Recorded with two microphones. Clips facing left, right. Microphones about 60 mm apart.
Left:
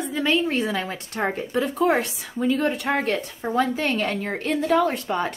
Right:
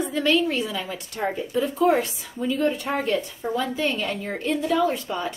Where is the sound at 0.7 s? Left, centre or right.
Left.